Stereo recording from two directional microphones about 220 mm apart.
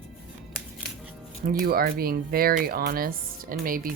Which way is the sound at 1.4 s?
45° right (ahead or behind).